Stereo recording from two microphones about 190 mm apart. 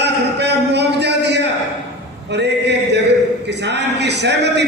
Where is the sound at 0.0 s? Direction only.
65° right (ahead or behind).